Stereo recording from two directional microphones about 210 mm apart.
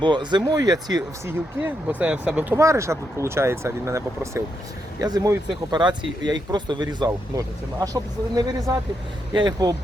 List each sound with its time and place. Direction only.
0.0 s speech: 20° right (ahead or behind)
1.6 s speech: 5° right (ahead or behind)